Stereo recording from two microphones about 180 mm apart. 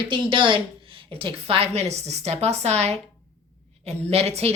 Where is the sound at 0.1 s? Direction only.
25° right (ahead or behind).